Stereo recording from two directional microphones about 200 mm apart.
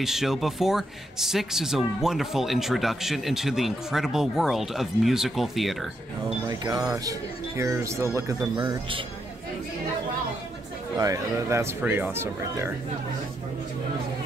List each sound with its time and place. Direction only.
0.0 s speech: centre (ahead or behind)
6.6 s speech: 20° right (ahead or behind)
11.0 s speech: 15° right (ahead or behind)